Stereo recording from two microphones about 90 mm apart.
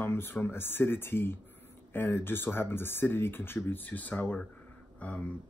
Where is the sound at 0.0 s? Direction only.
25° left (ahead or behind).